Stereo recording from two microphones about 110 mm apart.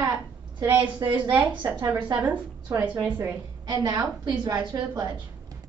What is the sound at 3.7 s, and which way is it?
A woman's voice, 35° right (ahead or behind).